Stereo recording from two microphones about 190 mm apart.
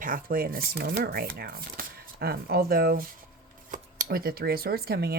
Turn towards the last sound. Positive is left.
turn(degrees=-55)  # may be behind; listen again after turning